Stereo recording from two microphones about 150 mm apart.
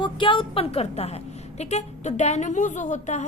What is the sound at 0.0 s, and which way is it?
A woman's voice, 35° left (ahead or behind).